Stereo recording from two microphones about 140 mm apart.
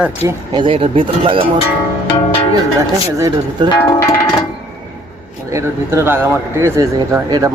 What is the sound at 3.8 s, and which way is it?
Music, 20° left (ahead or behind).